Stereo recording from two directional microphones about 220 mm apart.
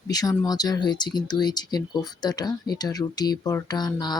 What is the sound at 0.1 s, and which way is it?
Speech, 15° left (ahead or behind).